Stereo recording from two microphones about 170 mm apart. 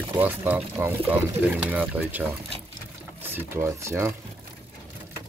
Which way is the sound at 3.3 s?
15° right (ahead or behind).